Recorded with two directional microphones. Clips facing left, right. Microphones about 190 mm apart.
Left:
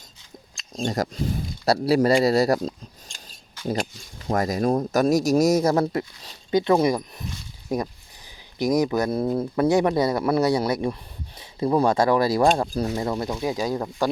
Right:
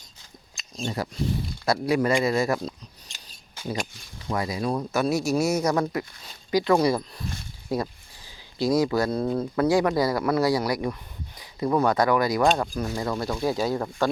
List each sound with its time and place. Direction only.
0.8 s speech: 40° left (ahead or behind)
4.3 s speech: 45° left (ahead or behind)
12.9 s speech: 25° left (ahead or behind)